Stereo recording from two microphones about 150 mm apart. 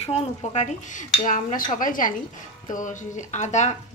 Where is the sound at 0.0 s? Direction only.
45° left (ahead or behind).